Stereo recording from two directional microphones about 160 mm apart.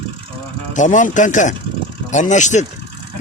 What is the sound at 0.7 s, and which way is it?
Speech, 50° left (ahead or behind).